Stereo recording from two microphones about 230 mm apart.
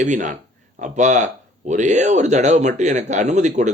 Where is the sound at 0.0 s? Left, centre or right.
Right.